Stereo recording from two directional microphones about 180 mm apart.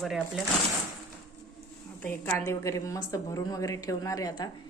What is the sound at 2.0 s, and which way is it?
A woman's voice, 15° left (ahead or behind).